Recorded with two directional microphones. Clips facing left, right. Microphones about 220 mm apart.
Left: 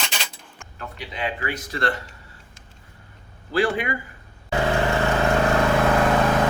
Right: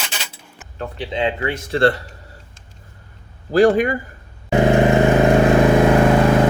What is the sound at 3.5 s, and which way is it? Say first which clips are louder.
Speech: right 9 dB; 45° right (ahead or behind).